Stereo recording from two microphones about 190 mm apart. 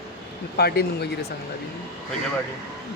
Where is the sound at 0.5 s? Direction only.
55° left (ahead or behind).